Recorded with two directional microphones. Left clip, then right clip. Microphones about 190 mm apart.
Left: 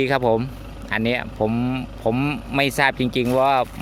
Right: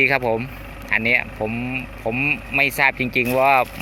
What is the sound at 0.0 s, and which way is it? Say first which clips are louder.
Speech: right 1 dB; 20° left (ahead or behind).